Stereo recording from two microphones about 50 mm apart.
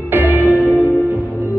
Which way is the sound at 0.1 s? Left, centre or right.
Right.